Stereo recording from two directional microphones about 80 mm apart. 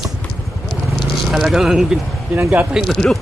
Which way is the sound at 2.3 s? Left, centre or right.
Right.